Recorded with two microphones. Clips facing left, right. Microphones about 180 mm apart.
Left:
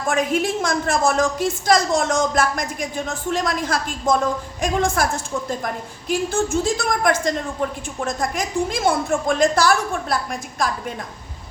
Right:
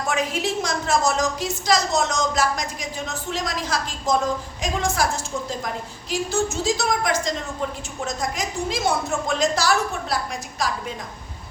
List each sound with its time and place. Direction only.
0.1 s a woman's voice: 50° left (ahead or behind)